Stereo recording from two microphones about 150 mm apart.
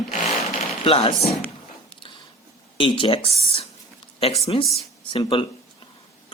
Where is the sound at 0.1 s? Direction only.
50° left (ahead or behind).